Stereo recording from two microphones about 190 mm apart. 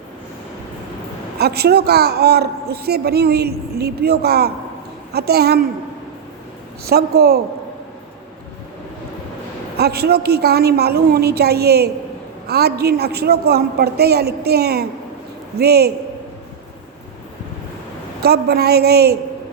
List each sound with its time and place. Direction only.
1.4 s speech: 55° right (ahead or behind)
6.8 s speech: 55° right (ahead or behind)
9.7 s speech: 55° right (ahead or behind)
18.2 s speech: 55° right (ahead or behind)